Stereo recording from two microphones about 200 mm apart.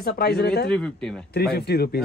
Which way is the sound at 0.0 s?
50° left (ahead or behind).